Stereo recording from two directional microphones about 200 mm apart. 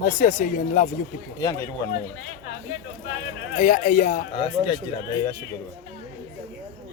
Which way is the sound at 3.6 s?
40° left (ahead or behind).